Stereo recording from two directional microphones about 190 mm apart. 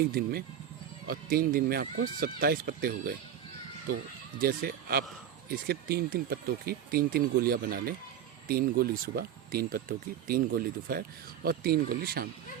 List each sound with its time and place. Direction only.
0.0 s speech: 50° right (ahead or behind)